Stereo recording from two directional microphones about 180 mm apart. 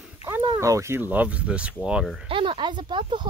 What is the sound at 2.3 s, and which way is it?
Speech, 30° right (ahead or behind).